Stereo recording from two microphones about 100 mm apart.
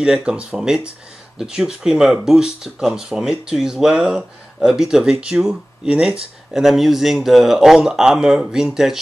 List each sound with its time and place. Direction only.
0.0 s speech: 5° right (ahead or behind)